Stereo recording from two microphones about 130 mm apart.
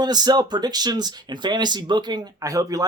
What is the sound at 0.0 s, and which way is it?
Speech, 30° right (ahead or behind).